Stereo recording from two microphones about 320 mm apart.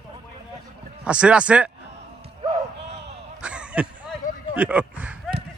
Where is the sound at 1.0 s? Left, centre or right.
Centre.